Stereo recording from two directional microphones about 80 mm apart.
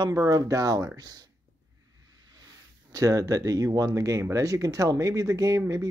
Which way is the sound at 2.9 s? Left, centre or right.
Right.